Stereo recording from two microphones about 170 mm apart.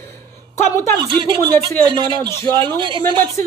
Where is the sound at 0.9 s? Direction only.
30° right (ahead or behind).